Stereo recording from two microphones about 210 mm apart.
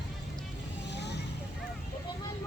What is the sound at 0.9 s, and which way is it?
Vehicle, 55° left (ahead or behind).